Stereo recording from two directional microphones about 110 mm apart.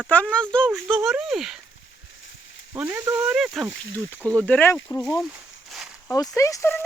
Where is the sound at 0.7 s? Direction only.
Centre (ahead or behind).